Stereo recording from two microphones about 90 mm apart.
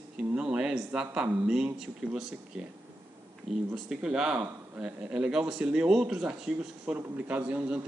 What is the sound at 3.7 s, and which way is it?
Speech, 5° right (ahead or behind).